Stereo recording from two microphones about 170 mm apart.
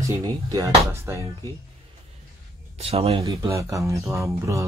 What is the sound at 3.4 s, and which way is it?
Speech, 15° right (ahead or behind).